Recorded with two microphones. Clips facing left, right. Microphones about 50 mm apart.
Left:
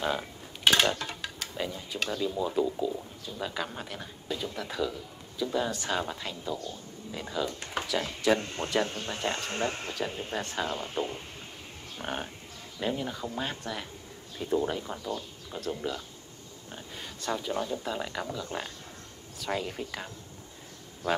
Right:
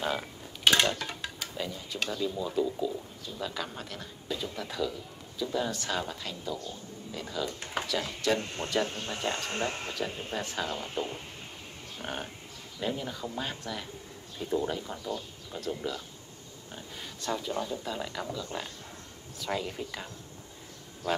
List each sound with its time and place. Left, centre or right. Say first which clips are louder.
0.7 s dishes: left 1 dB; centre
1.0 s a sound: even; centre
2.0 s speech: left 2 dB; centre